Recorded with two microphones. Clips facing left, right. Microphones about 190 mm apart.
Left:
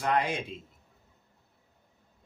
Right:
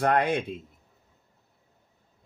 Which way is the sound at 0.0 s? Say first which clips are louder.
Right 5 dB; 55° right (ahead or behind).